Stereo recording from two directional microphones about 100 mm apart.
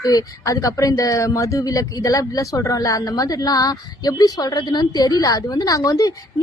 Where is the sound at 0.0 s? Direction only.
35° left (ahead or behind).